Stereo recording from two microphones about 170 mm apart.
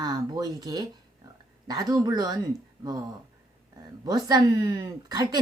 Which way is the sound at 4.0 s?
25° right (ahead or behind).